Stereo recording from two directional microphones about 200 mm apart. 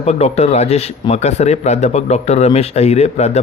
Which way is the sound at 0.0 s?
30° left (ahead or behind).